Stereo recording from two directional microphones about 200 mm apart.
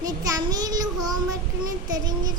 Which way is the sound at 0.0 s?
20° right (ahead or behind).